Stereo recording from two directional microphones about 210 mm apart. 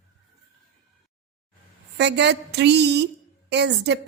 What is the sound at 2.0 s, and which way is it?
Speech, 55° right (ahead or behind).